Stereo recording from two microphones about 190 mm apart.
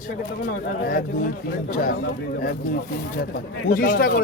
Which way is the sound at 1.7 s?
45° left (ahead or behind).